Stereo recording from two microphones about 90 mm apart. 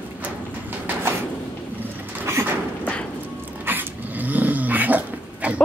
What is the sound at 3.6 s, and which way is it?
Dog, 25° right (ahead or behind).